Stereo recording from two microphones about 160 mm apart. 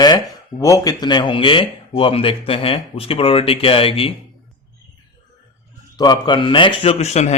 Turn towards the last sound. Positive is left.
turn(degrees=40)  # may be behind; listen again after turning